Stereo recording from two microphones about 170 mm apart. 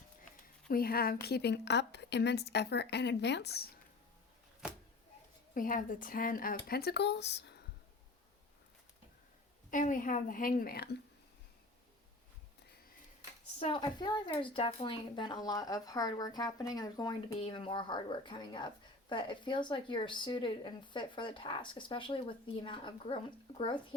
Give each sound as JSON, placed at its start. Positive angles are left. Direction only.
{"t": 0.7, "sound": "a woman's voice", "side_deg": 60}
{"t": 5.5, "sound": "speech", "side_deg": 50}
{"t": 9.6, "sound": "a woman's voice", "side_deg": 50}
{"t": 13.6, "sound": "a woman's voice", "side_deg": 30}